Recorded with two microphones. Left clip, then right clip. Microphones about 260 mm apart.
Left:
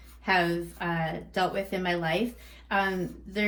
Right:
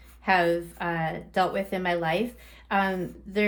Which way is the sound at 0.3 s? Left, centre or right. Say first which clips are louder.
Right 3 dB; right.